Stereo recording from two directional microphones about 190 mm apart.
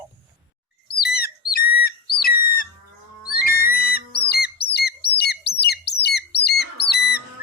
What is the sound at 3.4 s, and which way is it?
Music, 55° left (ahead or behind).